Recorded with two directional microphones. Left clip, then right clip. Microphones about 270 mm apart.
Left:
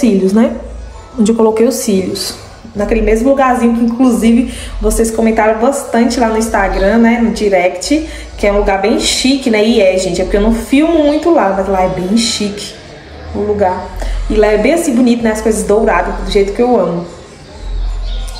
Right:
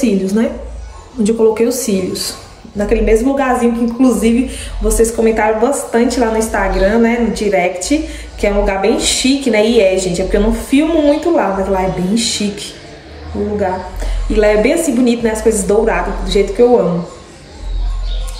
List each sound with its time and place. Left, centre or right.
0.0 s a woman's voice: centre
14.3 s a woman's voice: centre